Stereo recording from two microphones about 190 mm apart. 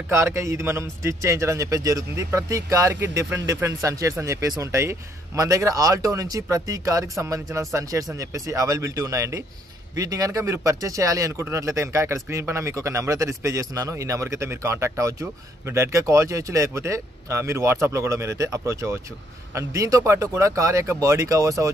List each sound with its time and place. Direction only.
0.1 s a man's voice: 15° right (ahead or behind)